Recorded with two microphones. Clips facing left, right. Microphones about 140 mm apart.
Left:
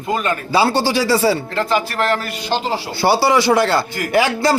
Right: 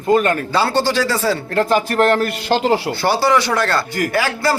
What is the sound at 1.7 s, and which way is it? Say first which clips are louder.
Speech: right 3 dB; 50° right (ahead or behind).